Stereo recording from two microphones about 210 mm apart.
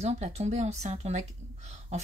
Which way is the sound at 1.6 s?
30° right (ahead or behind).